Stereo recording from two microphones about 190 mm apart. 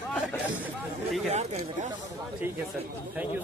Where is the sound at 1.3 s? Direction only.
35° right (ahead or behind).